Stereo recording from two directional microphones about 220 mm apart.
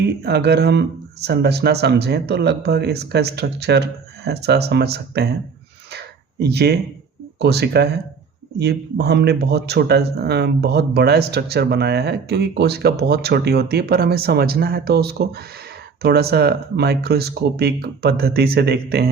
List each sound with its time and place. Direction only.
0.0 s speech: 50° right (ahead or behind)
5.9 s a sound: 50° right (ahead or behind)
7.3 s speech: 50° right (ahead or behind)